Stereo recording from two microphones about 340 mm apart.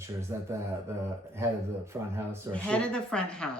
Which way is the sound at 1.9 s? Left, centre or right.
Centre.